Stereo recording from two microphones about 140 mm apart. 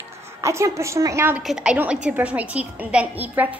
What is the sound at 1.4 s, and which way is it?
A woman's voice, 5° right (ahead or behind).